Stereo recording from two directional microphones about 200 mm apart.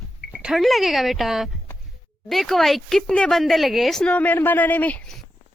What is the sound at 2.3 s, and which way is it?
Speech, centre (ahead or behind).